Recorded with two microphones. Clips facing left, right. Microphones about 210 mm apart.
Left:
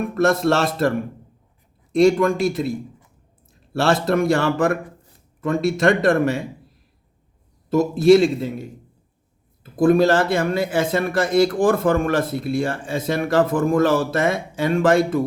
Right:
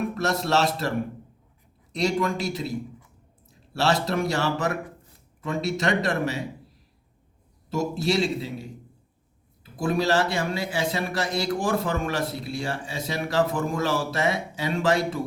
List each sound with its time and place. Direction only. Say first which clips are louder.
0.1 s a man's voice: left 7 dB; 50° left (ahead or behind)
7.7 s a man's voice: left 12 dB; 50° left (ahead or behind)
9.7 s a man's voice: left 8 dB; 55° left (ahead or behind)